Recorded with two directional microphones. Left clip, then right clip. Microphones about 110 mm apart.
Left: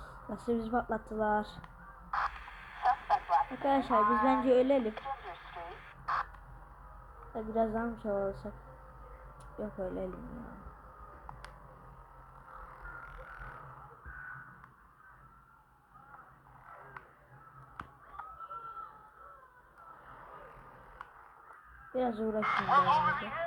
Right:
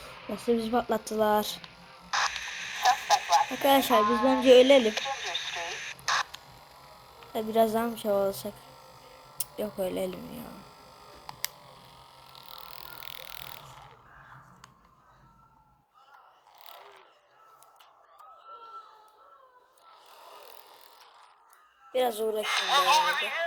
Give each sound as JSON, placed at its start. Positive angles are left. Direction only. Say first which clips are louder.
{"t": 0.0, "sound": "a sound", "louder": "right 7 dB", "side_deg": 10}
{"t": 0.6, "sound": "speech", "louder": "right 6 dB", "side_deg": -20}
{"t": 2.0, "sound": "radio", "louder": "right 6 dB", "side_deg": 0}
{"t": 3.7, "sound": "speech", "louder": "right 7 dB", "side_deg": -25}
{"t": 4.0, "sound": "speech", "louder": "right 3 dB", "side_deg": 5}
{"t": 4.3, "sound": "speech", "louder": "right 9 dB", "side_deg": -20}
{"t": 4.8, "sound": "radio", "louder": "right 9 dB", "side_deg": -5}
{"t": 7.3, "sound": "speech", "louder": "right 8 dB", "side_deg": -25}
{"t": 13.1, "sound": "a sound", "louder": "right 5 dB", "side_deg": 15}
{"t": 21.9, "sound": "speech", "louder": "right 6 dB", "side_deg": -25}
{"t": 22.4, "sound": "speech", "louder": "right 1 dB", "side_deg": -5}